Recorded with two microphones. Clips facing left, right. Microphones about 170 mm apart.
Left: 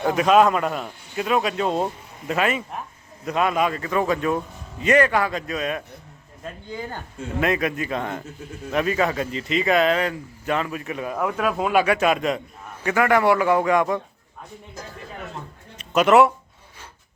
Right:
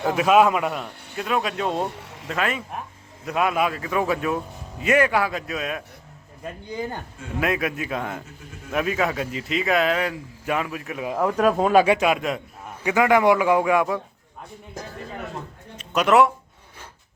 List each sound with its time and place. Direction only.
0.0 s speech: 5° right (ahead or behind)
6.4 s a man's voice: 15° right (ahead or behind)
7.3 s a man's voice: 5° right (ahead or behind)
11.3 s speech: 40° right (ahead or behind)
11.9 s a man's voice: 5° right (ahead or behind)
15.8 s speech: centre (ahead or behind)